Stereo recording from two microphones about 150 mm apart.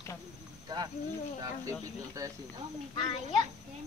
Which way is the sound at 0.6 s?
25° right (ahead or behind).